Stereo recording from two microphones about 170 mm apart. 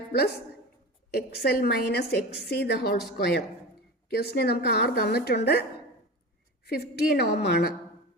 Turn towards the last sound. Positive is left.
turn(degrees=75)  # may be behind; listen again after turning